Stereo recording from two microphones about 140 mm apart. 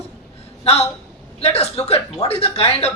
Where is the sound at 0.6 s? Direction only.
45° left (ahead or behind).